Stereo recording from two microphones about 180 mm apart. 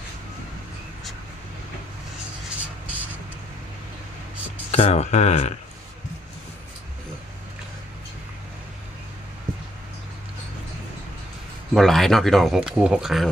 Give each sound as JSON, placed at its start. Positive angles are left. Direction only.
{"t": 2.6, "sound": "music", "side_deg": -10}
{"t": 4.7, "sound": "speech", "side_deg": 35}
{"t": 11.7, "sound": "speech", "side_deg": 0}